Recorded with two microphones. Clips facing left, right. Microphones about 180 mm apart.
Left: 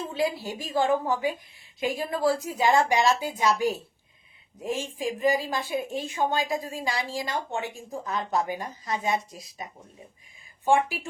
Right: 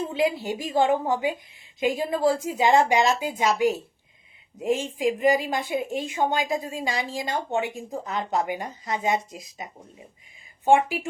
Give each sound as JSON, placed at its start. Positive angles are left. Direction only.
{"t": 0.1, "sound": "a woman's voice", "side_deg": -20}
{"t": 10.7, "sound": "speech", "side_deg": -20}